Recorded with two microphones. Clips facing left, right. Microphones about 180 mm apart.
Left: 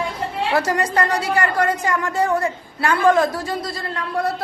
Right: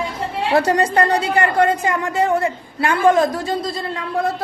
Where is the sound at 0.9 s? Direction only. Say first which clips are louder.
Right 3 dB; 30° right (ahead or behind).